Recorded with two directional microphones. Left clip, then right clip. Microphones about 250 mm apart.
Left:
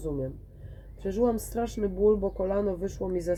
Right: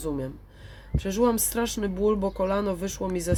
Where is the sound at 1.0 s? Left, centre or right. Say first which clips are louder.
Right 3 dB; centre.